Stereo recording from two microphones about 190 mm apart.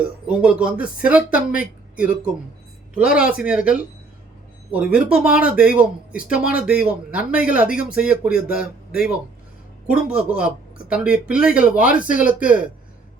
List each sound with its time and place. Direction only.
0.0 s speech: 5° right (ahead or behind)
3.1 s speech: 5° right (ahead or behind)
9.8 s speech: 5° right (ahead or behind)
11.9 s speech: 45° left (ahead or behind)
12.2 s speech: 5° right (ahead or behind)